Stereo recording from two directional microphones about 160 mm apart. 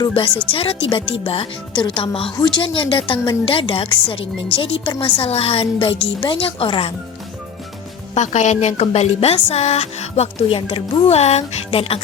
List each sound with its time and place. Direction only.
0.5 s speech: 35° left (ahead or behind)
8.1 s speech: 45° left (ahead or behind)